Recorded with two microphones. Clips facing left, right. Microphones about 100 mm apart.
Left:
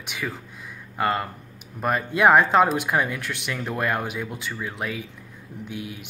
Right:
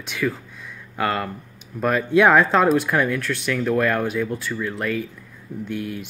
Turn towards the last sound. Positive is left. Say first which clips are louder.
# right 6 dB
turn(degrees=10)  # may be behind; listen again after turning